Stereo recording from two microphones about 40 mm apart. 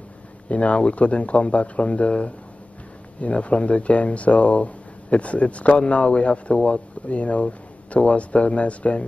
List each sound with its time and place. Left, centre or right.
0.5 s speech: left